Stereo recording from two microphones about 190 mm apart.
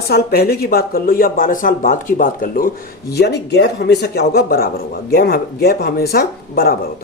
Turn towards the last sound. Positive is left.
turn(degrees=55)  # may be behind; listen again after turning